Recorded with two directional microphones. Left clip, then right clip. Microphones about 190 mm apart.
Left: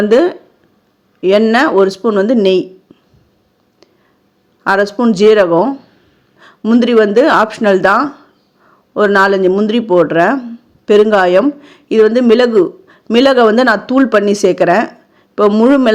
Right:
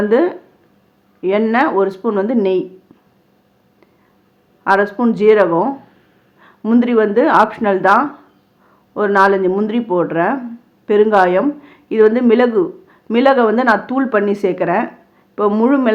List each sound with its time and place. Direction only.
0.0 s speech: 30° left (ahead or behind)
2.9 s a sound: 25° left (ahead or behind)
4.6 s a man's voice: 35° left (ahead or behind)